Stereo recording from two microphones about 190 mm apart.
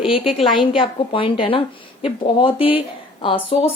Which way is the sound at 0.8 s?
25° left (ahead or behind).